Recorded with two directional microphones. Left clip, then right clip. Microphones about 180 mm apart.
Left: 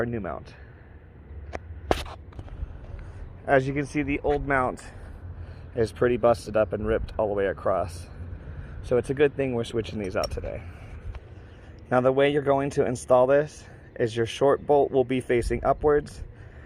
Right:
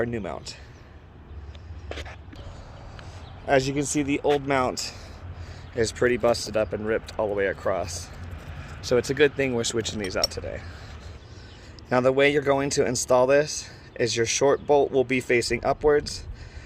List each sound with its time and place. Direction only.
0.0 s speech: 5° right (ahead or behind)
3.4 s speech: 10° right (ahead or behind)
5.7 s speech: 5° left (ahead or behind)
8.9 s speech: 10° right (ahead or behind)
11.9 s speech: 10° right (ahead or behind)
14.0 s speech: centre (ahead or behind)
14.4 s speech: 10° right (ahead or behind)
15.4 s speech: 15° right (ahead or behind)